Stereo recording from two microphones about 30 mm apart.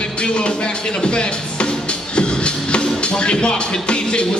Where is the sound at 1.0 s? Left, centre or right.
Left.